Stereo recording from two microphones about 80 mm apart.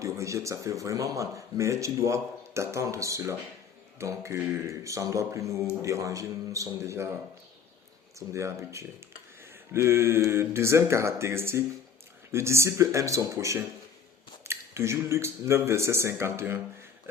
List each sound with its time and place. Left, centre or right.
0.0 s a man's voice: right
8.3 s speech: right